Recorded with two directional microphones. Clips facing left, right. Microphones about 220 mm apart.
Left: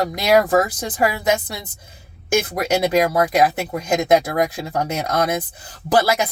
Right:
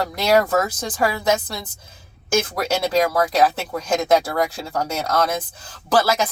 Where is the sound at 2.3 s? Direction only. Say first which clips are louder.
Left 2 dB; 15° left (ahead or behind).